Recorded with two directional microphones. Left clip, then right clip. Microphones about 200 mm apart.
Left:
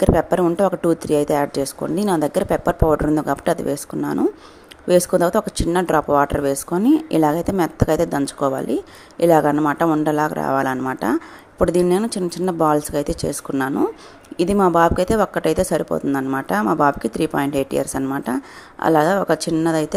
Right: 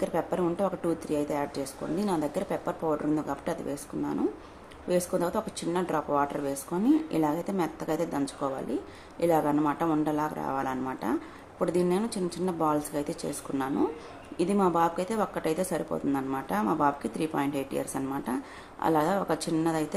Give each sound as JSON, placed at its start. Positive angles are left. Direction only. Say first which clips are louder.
{"t": 0.0, "sound": "speech", "louder": "left 12 dB", "side_deg": 40}